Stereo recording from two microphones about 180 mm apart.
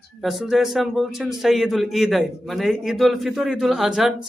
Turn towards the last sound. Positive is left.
turn(degrees=0)  # may be behind; listen again after turning